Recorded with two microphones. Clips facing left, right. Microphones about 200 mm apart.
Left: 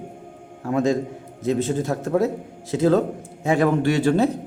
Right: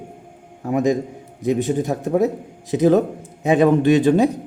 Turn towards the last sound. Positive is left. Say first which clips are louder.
# right 4 dB
turn(degrees=-15)  # may be behind; listen again after turning